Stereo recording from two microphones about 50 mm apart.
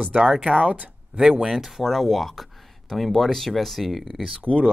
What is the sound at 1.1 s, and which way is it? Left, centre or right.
Speech, centre.